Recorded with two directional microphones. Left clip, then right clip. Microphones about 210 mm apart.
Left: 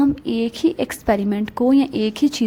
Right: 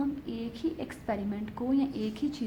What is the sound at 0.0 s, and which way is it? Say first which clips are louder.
A woman's voice: left 15 dB; 45° left (ahead or behind).